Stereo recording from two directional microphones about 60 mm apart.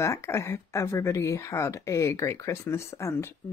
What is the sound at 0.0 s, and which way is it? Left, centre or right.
Speech, left.